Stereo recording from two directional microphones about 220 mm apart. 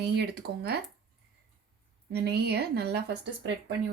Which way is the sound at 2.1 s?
50° right (ahead or behind).